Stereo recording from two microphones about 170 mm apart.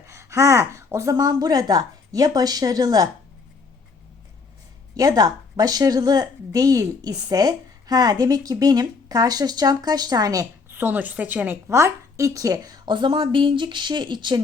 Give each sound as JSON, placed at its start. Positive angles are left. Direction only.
{"t": 0.0, "sound": "speech", "side_deg": -15}
{"t": 4.9, "sound": "a woman's voice", "side_deg": -20}